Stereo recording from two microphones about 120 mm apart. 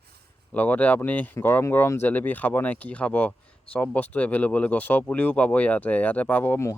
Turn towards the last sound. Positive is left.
turn(degrees=20)  # may be behind; listen again after turning